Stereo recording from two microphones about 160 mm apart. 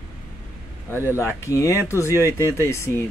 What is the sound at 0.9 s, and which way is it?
Speech, 15° right (ahead or behind).